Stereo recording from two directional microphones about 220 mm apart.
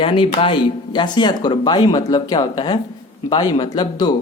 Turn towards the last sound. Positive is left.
turn(degrees=20)  # may be behind; listen again after turning